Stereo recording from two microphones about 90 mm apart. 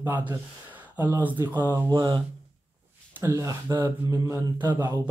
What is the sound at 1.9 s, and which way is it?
Speech, 55° right (ahead or behind).